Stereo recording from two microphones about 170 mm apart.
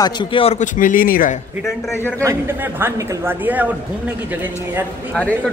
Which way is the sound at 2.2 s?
15° right (ahead or behind).